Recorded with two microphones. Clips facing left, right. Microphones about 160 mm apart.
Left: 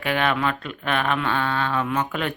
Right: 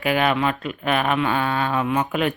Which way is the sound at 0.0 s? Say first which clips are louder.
Right 3 dB; 10° right (ahead or behind).